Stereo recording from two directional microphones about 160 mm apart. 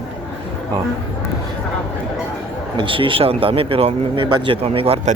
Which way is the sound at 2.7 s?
30° right (ahead or behind).